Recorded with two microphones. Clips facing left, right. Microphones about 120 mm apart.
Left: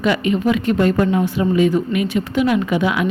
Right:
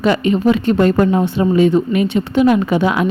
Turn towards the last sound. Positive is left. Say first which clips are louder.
# right 3 dB
turn(degrees=-35)  # may be behind; listen again after turning